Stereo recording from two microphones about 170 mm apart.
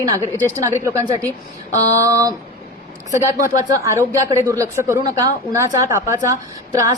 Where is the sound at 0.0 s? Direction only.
20° right (ahead or behind).